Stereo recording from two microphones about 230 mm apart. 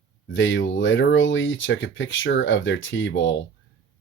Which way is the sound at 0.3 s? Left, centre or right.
Left.